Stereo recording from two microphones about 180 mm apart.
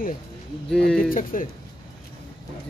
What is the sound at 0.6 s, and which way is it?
Speech, 5° left (ahead or behind).